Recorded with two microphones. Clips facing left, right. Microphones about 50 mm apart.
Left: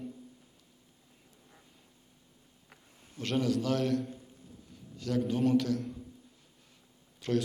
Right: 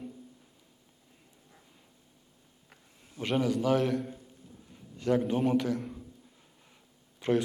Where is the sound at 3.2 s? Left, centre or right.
Centre.